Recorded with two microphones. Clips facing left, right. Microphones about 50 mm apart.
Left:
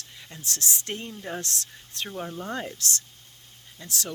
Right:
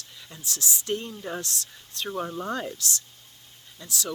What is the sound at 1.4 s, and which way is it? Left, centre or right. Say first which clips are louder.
Speech: left 1 dB; left.